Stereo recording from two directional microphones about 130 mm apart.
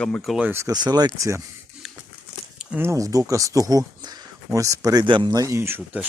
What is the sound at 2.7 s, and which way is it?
Speech, 20° right (ahead or behind).